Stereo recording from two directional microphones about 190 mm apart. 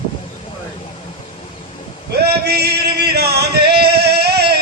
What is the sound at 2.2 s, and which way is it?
Singing, 55° right (ahead or behind).